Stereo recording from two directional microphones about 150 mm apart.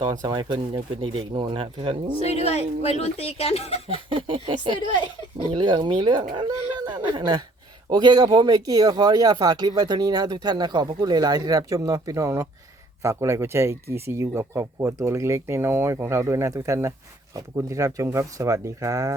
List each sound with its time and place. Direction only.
0.0 s speech: 25° right (ahead or behind)
2.2 s speech: 45° left (ahead or behind)
3.8 s speech: 35° right (ahead or behind)